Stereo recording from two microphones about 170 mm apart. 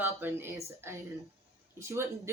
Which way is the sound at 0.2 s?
15° right (ahead or behind).